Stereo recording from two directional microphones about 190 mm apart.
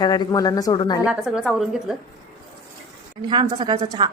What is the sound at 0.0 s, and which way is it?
Speech, 20° left (ahead or behind).